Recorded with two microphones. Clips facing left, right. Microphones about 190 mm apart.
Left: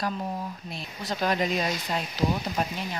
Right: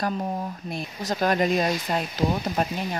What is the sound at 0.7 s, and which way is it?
Speech, 50° right (ahead or behind).